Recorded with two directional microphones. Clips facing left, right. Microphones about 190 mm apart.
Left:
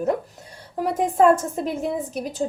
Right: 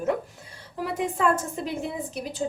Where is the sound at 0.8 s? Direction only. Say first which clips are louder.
Left 6 dB; 45° left (ahead or behind).